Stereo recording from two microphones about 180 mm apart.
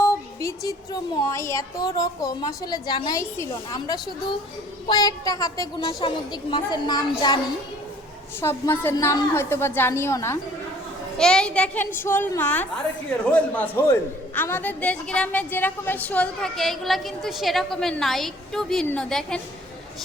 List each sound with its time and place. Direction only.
0.0 s a sound: 15° left (ahead or behind)
1.3 s a woman's voice: 15° left (ahead or behind)
8.4 s a woman's voice: 15° left (ahead or behind)
11.2 s a woman's voice: 5° left (ahead or behind)